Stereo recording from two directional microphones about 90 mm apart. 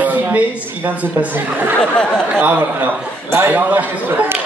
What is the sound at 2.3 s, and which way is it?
A man's voice, 20° right (ahead or behind).